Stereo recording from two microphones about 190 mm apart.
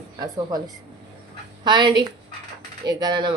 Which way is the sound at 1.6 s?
25° right (ahead or behind).